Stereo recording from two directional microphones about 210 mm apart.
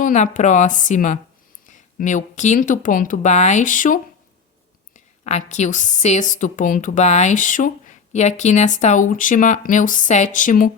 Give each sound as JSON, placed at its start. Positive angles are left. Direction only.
{"t": 0.0, "sound": "a woman's voice", "side_deg": 35}